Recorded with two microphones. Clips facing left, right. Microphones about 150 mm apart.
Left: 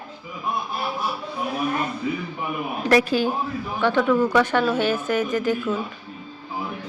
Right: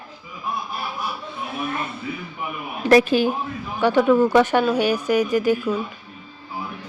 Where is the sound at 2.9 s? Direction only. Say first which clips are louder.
Right 4 dB; 20° right (ahead or behind).